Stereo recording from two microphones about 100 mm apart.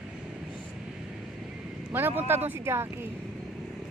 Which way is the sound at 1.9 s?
20° right (ahead or behind).